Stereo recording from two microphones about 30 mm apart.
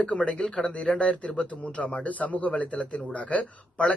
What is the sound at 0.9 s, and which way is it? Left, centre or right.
Speech, left.